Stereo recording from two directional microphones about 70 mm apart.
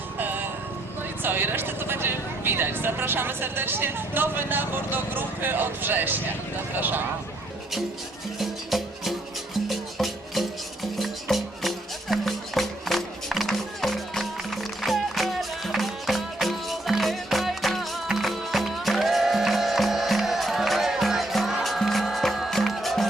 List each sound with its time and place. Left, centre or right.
1.2 s speech: right
8.4 s music: centre